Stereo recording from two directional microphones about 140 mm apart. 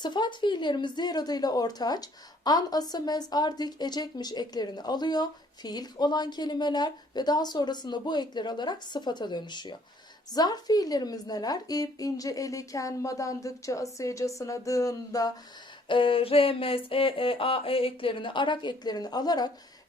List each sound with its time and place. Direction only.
0.0 s a woman's voice: 35° left (ahead or behind)
15.9 s a woman's voice: 40° left (ahead or behind)